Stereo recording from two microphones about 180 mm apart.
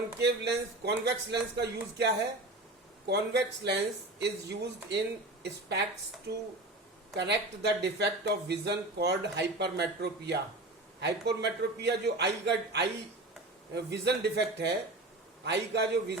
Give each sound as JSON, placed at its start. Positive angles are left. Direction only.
{"t": 0.2, "sound": "a woman's voice", "side_deg": -65}
{"t": 7.2, "sound": "speech", "side_deg": -70}
{"t": 13.9, "sound": "speech", "side_deg": -70}